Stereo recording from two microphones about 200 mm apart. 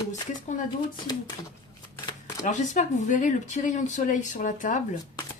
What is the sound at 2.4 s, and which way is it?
Speech, 40° left (ahead or behind).